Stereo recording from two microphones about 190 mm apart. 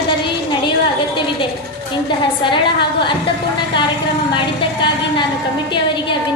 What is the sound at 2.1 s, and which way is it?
A woman's voice, 25° left (ahead or behind).